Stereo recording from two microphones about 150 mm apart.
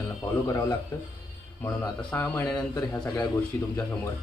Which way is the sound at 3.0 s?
25° left (ahead or behind).